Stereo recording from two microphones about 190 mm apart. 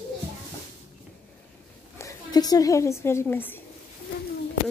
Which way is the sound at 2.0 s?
20° left (ahead or behind).